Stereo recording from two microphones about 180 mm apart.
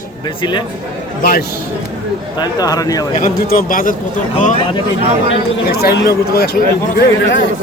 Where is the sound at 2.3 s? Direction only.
20° left (ahead or behind).